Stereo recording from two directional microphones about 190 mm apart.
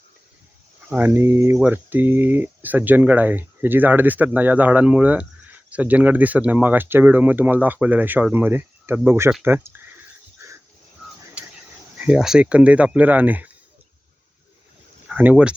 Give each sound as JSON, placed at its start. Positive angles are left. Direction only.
{"t": 0.9, "sound": "speech", "side_deg": -10}
{"t": 11.9, "sound": "speech", "side_deg": -5}
{"t": 15.1, "sound": "speech", "side_deg": -10}